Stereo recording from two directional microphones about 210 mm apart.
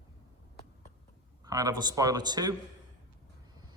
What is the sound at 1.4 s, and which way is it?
Speech, 15° right (ahead or behind).